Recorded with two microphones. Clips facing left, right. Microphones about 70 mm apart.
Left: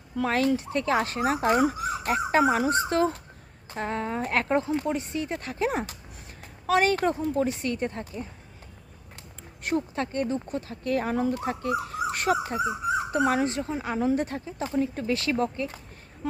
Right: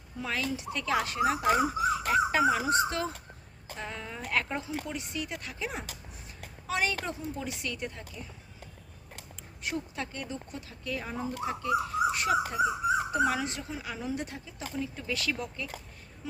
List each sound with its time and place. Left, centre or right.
0.2 s speech: left
7.4 s speech: left
9.6 s speech: left
16.2 s speech: left